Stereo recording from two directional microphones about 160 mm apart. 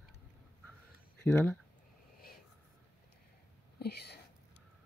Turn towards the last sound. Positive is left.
turn(degrees=90)